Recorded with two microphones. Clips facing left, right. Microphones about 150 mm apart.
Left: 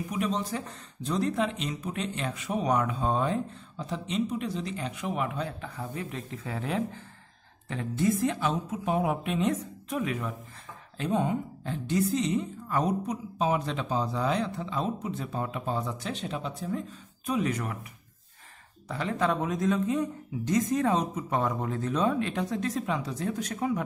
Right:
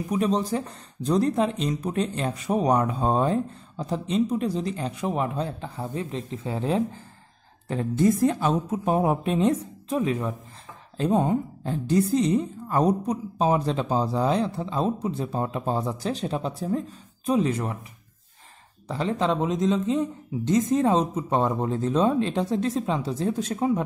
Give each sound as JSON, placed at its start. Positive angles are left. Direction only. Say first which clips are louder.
{"t": 0.1, "sound": "speech", "louder": "right 7 dB", "side_deg": -35}
{"t": 18.9, "sound": "speech", "louder": "right 3 dB", "side_deg": -30}